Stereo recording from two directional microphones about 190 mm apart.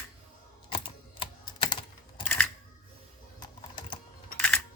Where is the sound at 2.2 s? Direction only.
5° left (ahead or behind).